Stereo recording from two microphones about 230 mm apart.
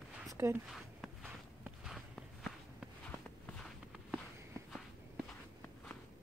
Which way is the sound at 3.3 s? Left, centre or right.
Centre.